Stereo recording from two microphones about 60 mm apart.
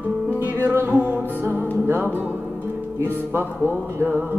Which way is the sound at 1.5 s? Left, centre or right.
Left.